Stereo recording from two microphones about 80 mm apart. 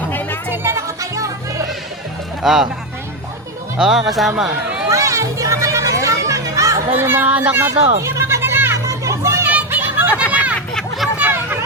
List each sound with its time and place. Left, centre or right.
0.1 s music: left
0.5 s music: right
1.1 s music: right
2.4 s speech: centre
3.8 s speech: centre
4.9 s children playing: right
6.9 s speech: right
7.7 s music: right
8.9 s children playing: right
9.6 s a sound: right
10.8 s a sound: centre
11.2 s chatter: right